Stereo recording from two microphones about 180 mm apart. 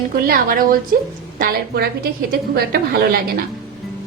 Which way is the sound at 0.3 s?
55° right (ahead or behind).